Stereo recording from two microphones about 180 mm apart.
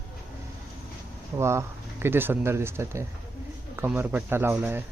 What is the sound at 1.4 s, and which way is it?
Speech, 15° right (ahead or behind).